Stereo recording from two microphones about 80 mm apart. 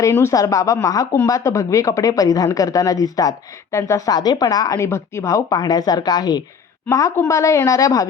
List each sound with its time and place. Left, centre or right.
0.0 s speech: left
5.5 s a woman's voice: left
6.9 s a woman's voice: left